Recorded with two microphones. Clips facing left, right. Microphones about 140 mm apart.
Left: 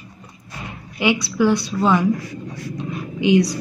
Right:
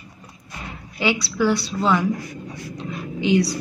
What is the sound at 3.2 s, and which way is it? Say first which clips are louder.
Speech: left 3 dB; 15° left (ahead or behind).